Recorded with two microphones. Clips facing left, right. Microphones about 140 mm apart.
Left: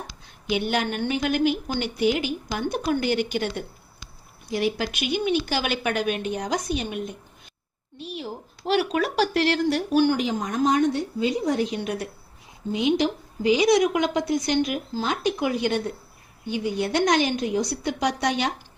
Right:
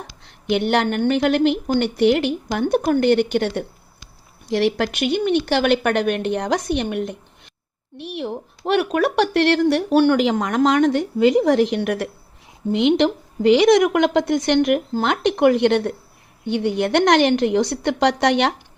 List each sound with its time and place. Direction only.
0.3 s a woman's voice: 65° right (ahead or behind)
4.4 s a woman's voice: 75° right (ahead or behind)